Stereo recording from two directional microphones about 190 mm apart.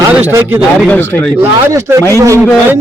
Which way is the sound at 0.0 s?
10° right (ahead or behind).